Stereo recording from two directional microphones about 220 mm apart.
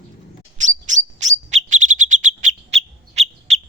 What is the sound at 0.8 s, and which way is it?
Bird, 35° right (ahead or behind).